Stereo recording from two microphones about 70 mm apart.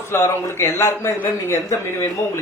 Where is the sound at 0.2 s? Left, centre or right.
Left.